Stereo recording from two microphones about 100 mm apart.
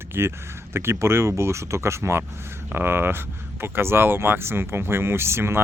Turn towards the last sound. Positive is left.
turn(degrees=-25)  # may be behind; listen again after turning